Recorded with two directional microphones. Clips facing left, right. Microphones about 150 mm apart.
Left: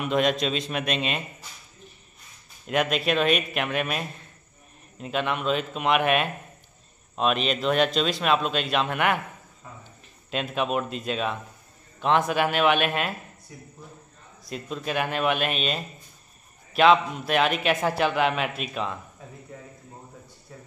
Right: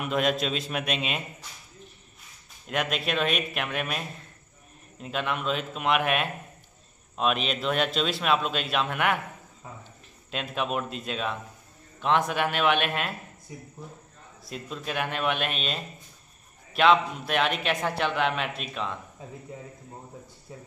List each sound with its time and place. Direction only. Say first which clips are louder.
0.0 s a man's voice: left 3 dB; 5° right (ahead or behind)
2.6 s a man's voice: left 5 dB; centre (ahead or behind)
10.3 s a man's voice: left 3 dB; centre (ahead or behind)
13.5 s speech: right 3 dB; 20° right (ahead or behind)
14.4 s a man's voice: left 4 dB; centre (ahead or behind)